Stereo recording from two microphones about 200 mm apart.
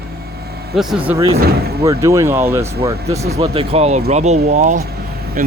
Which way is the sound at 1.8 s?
15° right (ahead or behind).